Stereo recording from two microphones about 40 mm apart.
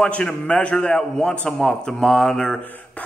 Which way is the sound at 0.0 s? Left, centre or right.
Left.